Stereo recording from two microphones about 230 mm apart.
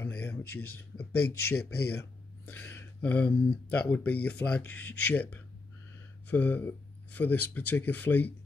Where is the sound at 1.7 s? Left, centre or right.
Left.